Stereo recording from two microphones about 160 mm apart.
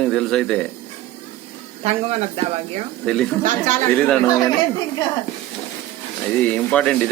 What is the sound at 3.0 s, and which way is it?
Speech, 5° left (ahead or behind).